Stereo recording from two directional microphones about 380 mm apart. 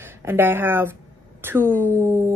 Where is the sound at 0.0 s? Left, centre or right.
Centre.